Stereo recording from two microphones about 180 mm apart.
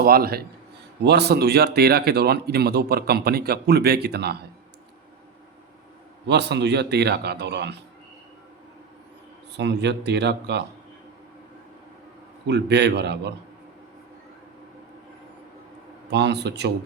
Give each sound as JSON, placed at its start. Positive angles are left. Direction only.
{"t": 0.0, "sound": "a man's voice", "side_deg": -55}
{"t": 6.2, "sound": "speech", "side_deg": -70}
{"t": 9.6, "sound": "speech", "side_deg": -70}
{"t": 12.5, "sound": "speech", "side_deg": -70}
{"t": 16.0, "sound": "speech", "side_deg": -70}